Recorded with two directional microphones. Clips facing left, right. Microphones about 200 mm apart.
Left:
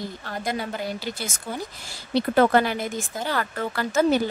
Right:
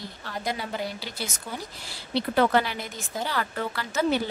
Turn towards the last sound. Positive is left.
turn(degrees=45)  # may be behind; listen again after turning